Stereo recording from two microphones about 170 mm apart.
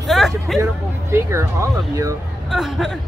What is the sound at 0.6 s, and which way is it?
Speech, 15° right (ahead or behind).